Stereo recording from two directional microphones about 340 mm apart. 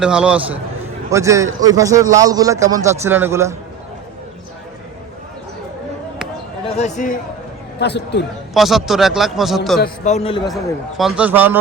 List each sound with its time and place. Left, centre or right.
0.0 s a man's voice: centre
6.7 s a man's voice: left
8.5 s a man's voice: centre
9.8 s a man's voice: left
10.5 s a man's voice: centre